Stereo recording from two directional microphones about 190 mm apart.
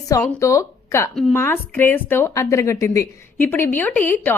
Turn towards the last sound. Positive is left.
turn(degrees=10)  # may be behind; listen again after turning